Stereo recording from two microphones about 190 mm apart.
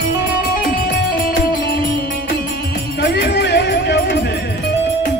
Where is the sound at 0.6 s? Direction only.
55° left (ahead or behind).